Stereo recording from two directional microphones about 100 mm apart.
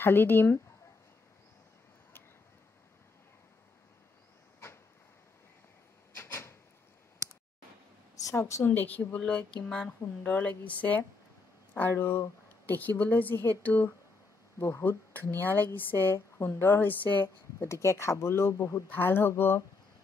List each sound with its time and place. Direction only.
0.0 s speech: 20° left (ahead or behind)
6.1 s a sound: 25° left (ahead or behind)
8.2 s speech: 30° left (ahead or behind)
18.9 s speech: 20° left (ahead or behind)